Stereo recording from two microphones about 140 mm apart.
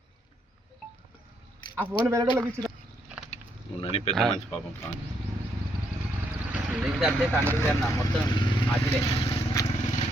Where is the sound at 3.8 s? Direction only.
45° left (ahead or behind).